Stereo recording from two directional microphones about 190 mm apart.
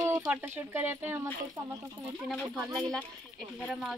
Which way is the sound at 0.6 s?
10° right (ahead or behind).